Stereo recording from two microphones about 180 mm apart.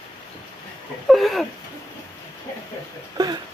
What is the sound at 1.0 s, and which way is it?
Speech, centre (ahead or behind).